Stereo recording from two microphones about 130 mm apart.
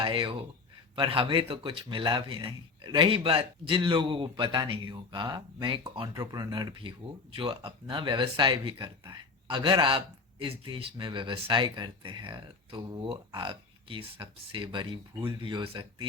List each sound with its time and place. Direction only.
0.0 s speech: 40° right (ahead or behind)